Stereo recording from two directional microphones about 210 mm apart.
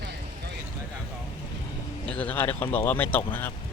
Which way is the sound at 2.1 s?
5° left (ahead or behind).